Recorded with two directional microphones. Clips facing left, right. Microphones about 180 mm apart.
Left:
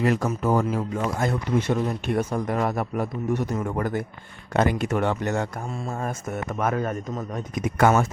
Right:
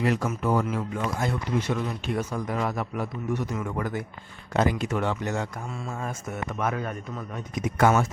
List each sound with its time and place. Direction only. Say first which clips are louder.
0.0 s a man's voice: left 3 dB; 45° left (ahead or behind)
4.5 s a man's voice: left 2 dB; 60° left (ahead or behind)
5.6 s a man's voice: left 4 dB; 35° left (ahead or behind)